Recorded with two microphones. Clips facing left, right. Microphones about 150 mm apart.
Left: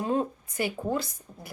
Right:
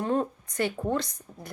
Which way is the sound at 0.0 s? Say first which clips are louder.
Even; 15° left (ahead or behind).